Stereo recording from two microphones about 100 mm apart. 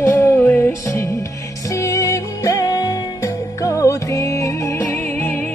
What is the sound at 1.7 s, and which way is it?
Music, 35° left (ahead or behind).